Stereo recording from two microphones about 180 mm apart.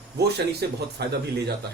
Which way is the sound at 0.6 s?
65° right (ahead or behind).